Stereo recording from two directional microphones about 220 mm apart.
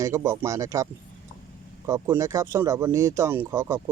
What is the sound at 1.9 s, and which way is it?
Speech, 15° right (ahead or behind).